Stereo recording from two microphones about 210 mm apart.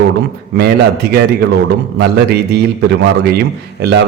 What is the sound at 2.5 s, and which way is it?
Speech, 50° right (ahead or behind).